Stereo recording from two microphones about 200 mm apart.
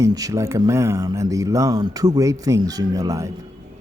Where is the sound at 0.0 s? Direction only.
15° right (ahead or behind).